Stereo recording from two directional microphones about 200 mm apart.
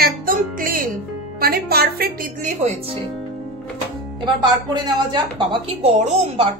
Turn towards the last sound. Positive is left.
turn(degrees=-30)  # may be behind; listen again after turning